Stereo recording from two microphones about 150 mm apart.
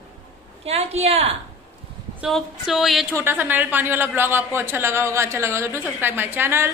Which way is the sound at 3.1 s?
15° right (ahead or behind).